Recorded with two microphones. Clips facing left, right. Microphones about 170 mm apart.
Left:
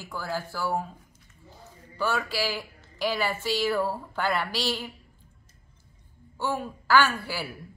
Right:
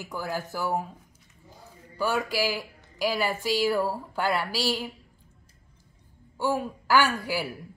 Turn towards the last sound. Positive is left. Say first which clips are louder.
# even
turn(degrees=-15)  # may be behind; listen again after turning